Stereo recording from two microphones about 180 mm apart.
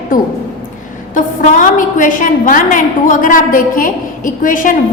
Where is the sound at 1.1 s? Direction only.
45° left (ahead or behind).